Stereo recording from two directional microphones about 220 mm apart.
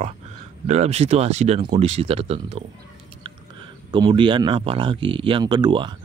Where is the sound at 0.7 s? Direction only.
30° right (ahead or behind).